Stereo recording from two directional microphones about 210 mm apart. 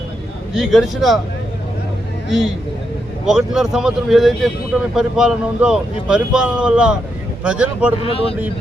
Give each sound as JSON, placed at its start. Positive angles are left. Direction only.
{"t": 0.5, "sound": "speech", "side_deg": 0}
{"t": 3.2, "sound": "speech", "side_deg": 0}
{"t": 8.0, "sound": "speech", "side_deg": 25}